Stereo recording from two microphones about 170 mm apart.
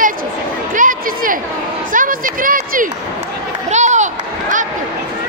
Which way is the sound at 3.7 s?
45° right (ahead or behind).